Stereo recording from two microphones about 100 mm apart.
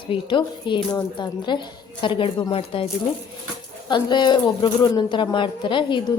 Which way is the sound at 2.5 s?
70° left (ahead or behind).